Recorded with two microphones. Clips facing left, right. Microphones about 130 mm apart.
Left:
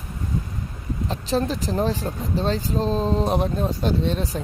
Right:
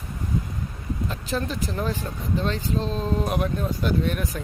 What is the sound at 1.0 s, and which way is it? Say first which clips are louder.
Speech: left 6 dB; 35° left (ahead or behind).